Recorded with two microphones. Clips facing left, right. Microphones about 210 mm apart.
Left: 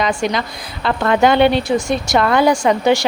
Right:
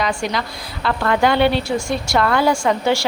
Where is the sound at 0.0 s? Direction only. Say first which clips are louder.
Left 3 dB; 20° left (ahead or behind).